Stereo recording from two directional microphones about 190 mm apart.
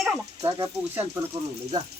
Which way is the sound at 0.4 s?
15° right (ahead or behind).